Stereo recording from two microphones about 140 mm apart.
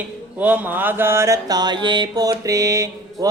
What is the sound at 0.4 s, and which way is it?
Mantra, 10° right (ahead or behind).